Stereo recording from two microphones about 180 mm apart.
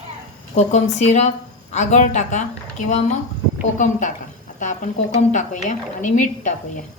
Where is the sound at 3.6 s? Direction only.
45° left (ahead or behind).